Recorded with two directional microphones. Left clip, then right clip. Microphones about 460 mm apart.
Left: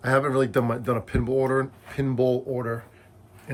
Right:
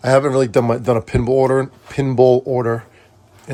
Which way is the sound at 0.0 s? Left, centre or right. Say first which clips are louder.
Right 8 dB; centre.